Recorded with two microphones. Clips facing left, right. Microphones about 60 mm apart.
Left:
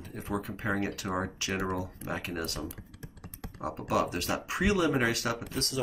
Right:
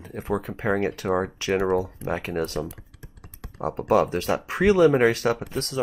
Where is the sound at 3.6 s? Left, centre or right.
Right.